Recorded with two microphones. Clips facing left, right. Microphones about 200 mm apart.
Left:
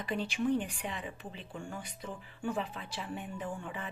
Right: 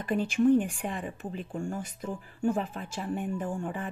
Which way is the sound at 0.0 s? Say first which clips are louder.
Right 8 dB; 50° right (ahead or behind).